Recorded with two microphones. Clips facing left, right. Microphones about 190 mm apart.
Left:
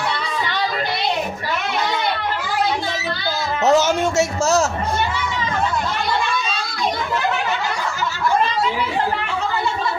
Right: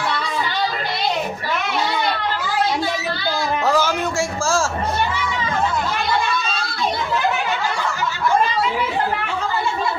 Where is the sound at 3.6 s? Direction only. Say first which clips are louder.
Left 6 dB; 20° left (ahead or behind).